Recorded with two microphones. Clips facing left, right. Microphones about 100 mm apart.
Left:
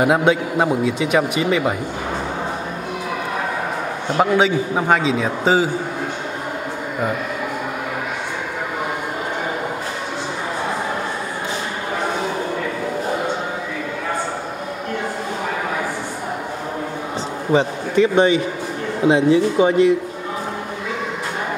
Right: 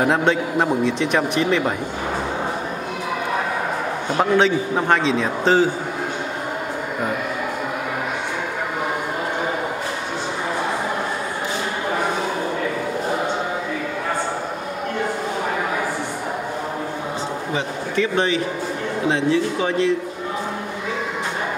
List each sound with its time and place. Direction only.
0.0 s a man's voice: 5° left (ahead or behind)
4.2 s a man's voice: 5° left (ahead or behind)
17.9 s a man's voice: 20° left (ahead or behind)